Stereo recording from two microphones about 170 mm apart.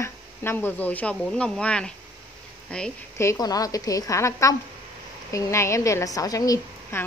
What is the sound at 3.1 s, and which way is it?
A woman's voice, 20° left (ahead or behind).